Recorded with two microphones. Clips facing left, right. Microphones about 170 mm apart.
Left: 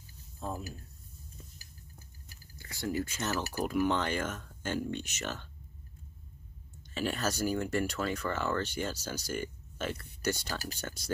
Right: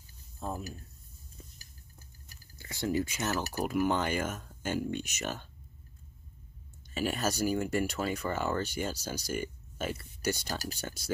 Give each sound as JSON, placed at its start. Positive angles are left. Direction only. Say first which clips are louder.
{"t": 0.4, "sound": "snake", "louder": "right 1 dB", "side_deg": -5}
{"t": 2.6, "sound": "speech", "louder": "right 3 dB", "side_deg": -25}
{"t": 3.2, "sound": "speech", "louder": "right 1 dB", "side_deg": -5}
{"t": 6.9, "sound": "speech", "louder": "right 1 dB", "side_deg": -10}